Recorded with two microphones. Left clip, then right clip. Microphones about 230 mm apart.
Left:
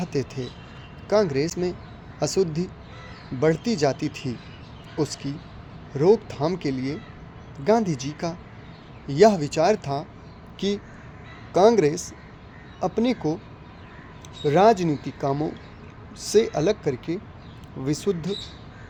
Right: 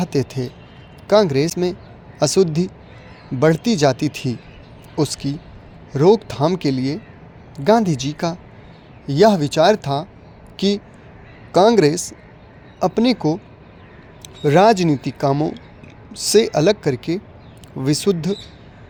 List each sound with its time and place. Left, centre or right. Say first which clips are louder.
0.0 s speech: right 7 dB; right
14.4 s speech: right 5 dB; right